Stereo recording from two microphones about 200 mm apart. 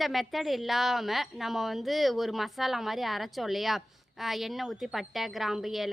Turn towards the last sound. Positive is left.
turn(degrees=0)  # may be behind; listen again after turning